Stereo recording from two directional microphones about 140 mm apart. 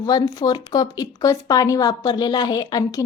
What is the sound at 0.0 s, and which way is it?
A woman's voice, 30° left (ahead or behind).